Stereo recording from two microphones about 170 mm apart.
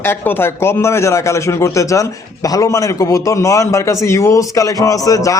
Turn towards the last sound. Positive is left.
turn(degrees=20)  # may be behind; listen again after turning